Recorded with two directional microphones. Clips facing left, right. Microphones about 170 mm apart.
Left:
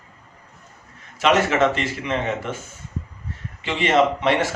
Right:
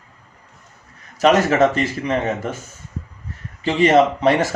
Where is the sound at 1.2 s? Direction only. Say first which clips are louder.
Right 4 dB; 40° right (ahead or behind).